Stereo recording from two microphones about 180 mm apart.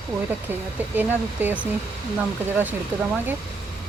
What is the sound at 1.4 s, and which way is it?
Speech, 10° right (ahead or behind).